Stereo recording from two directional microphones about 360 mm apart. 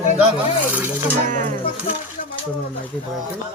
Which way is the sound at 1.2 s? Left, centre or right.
Right.